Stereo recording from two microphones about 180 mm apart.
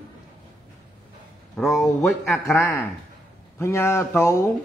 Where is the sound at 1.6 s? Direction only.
15° left (ahead or behind).